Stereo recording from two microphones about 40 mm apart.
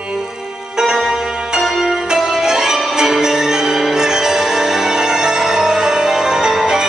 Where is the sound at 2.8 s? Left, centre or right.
Centre.